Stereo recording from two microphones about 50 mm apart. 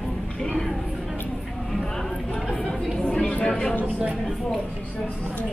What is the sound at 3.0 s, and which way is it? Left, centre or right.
Chatter, centre.